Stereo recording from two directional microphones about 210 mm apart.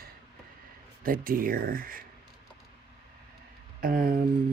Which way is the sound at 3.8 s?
45° right (ahead or behind).